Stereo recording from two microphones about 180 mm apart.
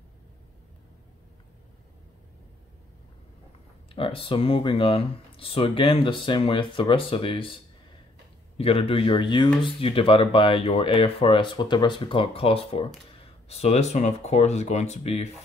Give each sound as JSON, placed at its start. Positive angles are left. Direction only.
{"t": 3.9, "sound": "speech", "side_deg": 30}